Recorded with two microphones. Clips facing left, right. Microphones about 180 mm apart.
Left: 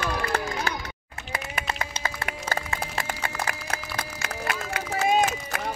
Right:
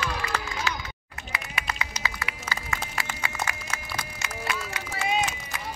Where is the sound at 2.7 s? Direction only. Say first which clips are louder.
Left 3 dB; 55° left (ahead or behind).